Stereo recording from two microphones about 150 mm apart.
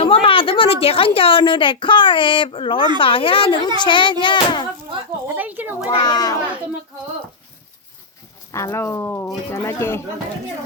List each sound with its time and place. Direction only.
0.0 s a woman's voice: 35° left (ahead or behind)
5.4 s a child's voice: 10° right (ahead or behind)
6.0 s a child's voice: 25° left (ahead or behind)
8.5 s speech: 20° left (ahead or behind)